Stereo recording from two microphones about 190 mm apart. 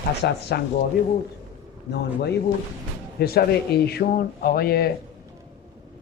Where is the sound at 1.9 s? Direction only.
60° left (ahead or behind).